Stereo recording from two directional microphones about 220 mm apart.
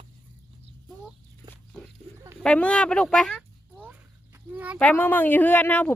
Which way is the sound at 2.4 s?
5° left (ahead or behind).